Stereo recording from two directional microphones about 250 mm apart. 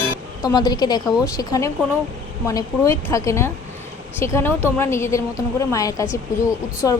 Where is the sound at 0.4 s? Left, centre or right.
Centre.